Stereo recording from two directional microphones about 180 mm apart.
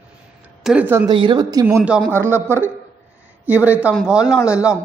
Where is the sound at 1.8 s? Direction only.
Centre (ahead or behind).